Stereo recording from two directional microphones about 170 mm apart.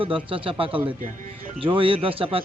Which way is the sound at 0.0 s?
30° right (ahead or behind).